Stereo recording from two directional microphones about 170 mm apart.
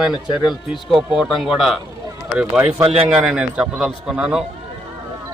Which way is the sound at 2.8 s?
35° right (ahead or behind).